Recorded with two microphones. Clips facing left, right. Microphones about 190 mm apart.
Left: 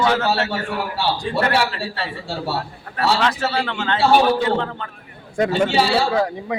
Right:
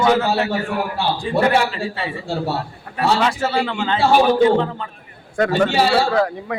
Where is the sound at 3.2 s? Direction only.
10° right (ahead or behind).